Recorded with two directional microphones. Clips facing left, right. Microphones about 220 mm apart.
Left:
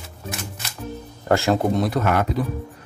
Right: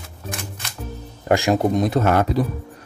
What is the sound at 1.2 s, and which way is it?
Speech, 15° right (ahead or behind).